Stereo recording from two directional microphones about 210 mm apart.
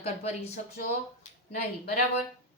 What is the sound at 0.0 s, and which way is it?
Speech, 30° left (ahead or behind).